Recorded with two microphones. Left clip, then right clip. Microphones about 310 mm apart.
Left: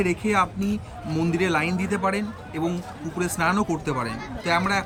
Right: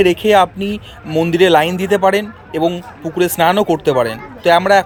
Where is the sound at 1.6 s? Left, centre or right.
Right.